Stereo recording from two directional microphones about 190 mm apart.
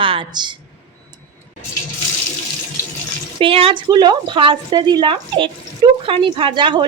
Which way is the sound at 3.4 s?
30° right (ahead or behind).